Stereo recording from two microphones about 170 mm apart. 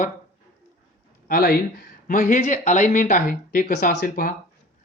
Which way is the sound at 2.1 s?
50° left (ahead or behind).